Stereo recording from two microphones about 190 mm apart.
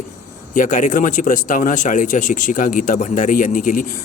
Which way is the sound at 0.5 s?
40° left (ahead or behind).